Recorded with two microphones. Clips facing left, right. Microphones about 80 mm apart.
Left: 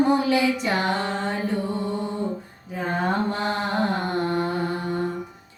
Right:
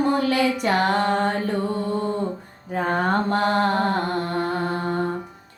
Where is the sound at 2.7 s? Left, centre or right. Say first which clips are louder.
Right 3 dB; right.